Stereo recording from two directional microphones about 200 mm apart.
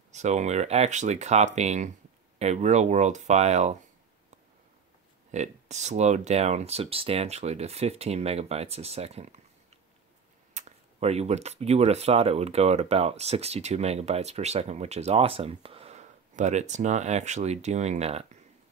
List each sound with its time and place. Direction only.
0.1 s speech: 35° right (ahead or behind)
5.3 s speech: 35° right (ahead or behind)
10.5 s speech: 30° right (ahead or behind)